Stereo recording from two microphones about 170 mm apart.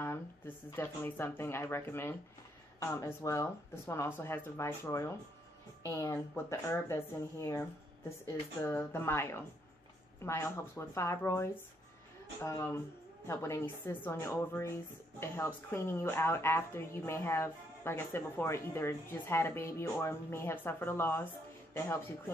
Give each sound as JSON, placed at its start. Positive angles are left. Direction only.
{"t": 0.7, "sound": "speech", "side_deg": 10}
{"t": 8.6, "sound": "speech", "side_deg": 15}